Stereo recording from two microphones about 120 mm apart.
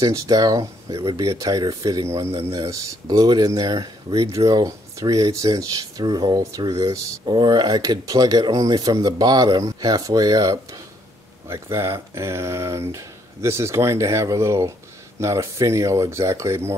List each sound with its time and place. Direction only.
0.0 s speech: 30° right (ahead or behind)
7.2 s speech: 40° right (ahead or behind)